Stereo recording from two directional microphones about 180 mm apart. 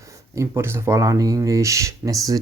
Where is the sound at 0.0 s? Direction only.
15° right (ahead or behind).